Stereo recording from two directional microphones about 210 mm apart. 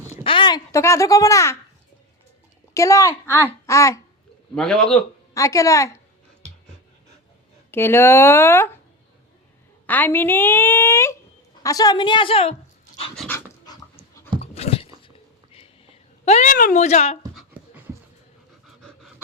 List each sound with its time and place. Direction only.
0.1 s speech: 25° left (ahead or behind)
2.7 s a woman's voice: 15° left (ahead or behind)
4.5 s a man's voice: 5° left (ahead or behind)
5.3 s a woman's voice: 15° left (ahead or behind)
7.7 s a woman's voice: 10° left (ahead or behind)
9.8 s a woman's voice: 10° left (ahead or behind); by 12.5 s 25° left (ahead or behind)
13.1 s a woman's voice: 10° left (ahead or behind)
14.4 s a sound: 30° left (ahead or behind)
16.2 s a woman's voice: 35° left (ahead or behind)
17.3 s dog: 10° right (ahead or behind)